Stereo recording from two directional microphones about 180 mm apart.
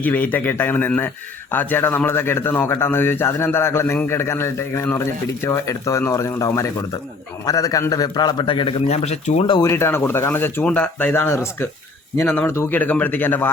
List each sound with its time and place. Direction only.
0.0 s a man's voice: 10° left (ahead or behind); by 9.4 s 40° left (ahead or behind)
9.5 s a man's voice: 20° left (ahead or behind)